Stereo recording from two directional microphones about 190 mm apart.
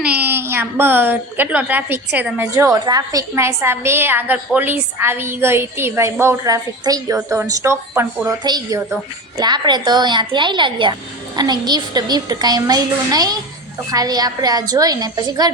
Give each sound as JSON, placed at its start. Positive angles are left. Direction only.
{"t": 0.0, "sound": "a woman's voice", "side_deg": -10}